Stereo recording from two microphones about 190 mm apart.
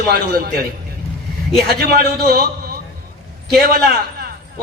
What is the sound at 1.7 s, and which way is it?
Speech, 55° right (ahead or behind).